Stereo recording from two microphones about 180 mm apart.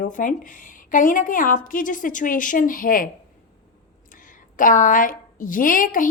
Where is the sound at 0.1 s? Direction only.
45° left (ahead or behind).